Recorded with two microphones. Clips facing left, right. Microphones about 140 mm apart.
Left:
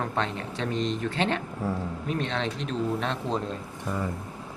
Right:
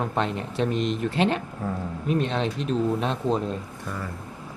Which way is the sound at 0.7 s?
25° left (ahead or behind).